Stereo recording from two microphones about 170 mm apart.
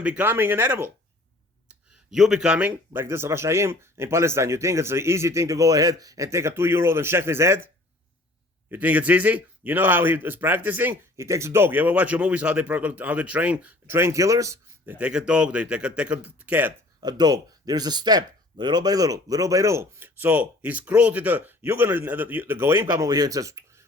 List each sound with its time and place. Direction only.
0.0 s a man's voice: 10° right (ahead or behind)
1.6 s a man's voice: 5° right (ahead or behind)
8.7 s a man's voice: 10° right (ahead or behind)
14.9 s a man's voice: 5° right (ahead or behind)
17.0 s a man's voice: 25° right (ahead or behind)